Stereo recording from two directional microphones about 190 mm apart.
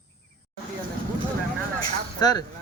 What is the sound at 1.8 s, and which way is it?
Speech, 20° left (ahead or behind).